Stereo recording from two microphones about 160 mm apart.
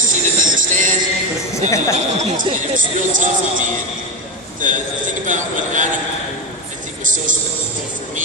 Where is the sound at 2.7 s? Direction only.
55° right (ahead or behind).